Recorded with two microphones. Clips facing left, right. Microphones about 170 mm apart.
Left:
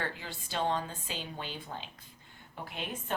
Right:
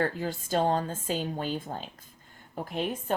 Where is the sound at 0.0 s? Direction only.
45° right (ahead or behind).